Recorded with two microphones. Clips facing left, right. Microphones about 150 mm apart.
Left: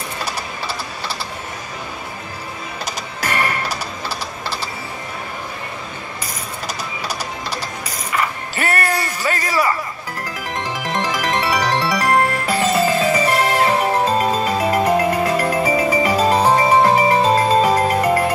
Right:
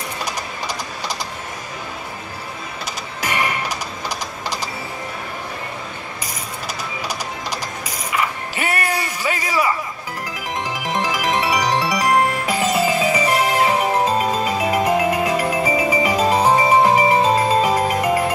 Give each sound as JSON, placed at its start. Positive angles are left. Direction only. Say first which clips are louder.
{"t": 0.2, "sound": "a sound", "louder": "left 1 dB", "side_deg": -15}
{"t": 3.2, "sound": "music", "louder": "left 1 dB", "side_deg": -10}
{"t": 8.5, "sound": "music", "louder": "left 2 dB", "side_deg": -10}